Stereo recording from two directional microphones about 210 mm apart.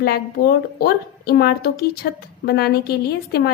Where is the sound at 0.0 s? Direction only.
50° left (ahead or behind).